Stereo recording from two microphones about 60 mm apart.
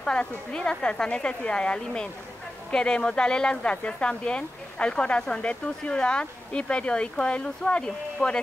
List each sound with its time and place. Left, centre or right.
0.0 s speech: centre